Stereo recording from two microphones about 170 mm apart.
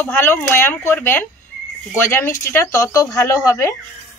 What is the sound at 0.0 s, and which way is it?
Speech, 10° left (ahead or behind).